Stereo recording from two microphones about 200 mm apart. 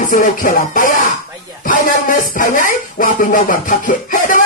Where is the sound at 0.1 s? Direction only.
45° left (ahead or behind).